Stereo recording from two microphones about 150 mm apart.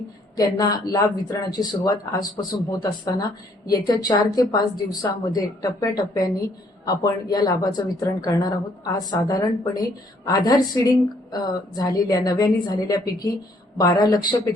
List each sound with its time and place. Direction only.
0.3 s speech: 25° left (ahead or behind)